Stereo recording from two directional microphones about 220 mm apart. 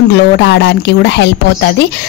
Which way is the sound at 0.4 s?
50° left (ahead or behind).